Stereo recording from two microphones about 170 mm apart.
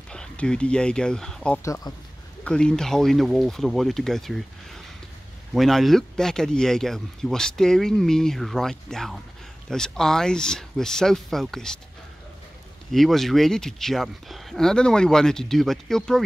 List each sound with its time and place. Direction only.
0.1 s speech: 5° left (ahead or behind)
1.6 s speech: 20° left (ahead or behind)
2.4 s speech: 5° left (ahead or behind)
5.5 s speech: centre (ahead or behind)
12.9 s speech: centre (ahead or behind)